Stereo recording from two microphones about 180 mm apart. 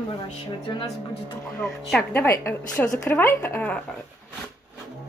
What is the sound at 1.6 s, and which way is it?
A woman's voice, 5° left (ahead or behind).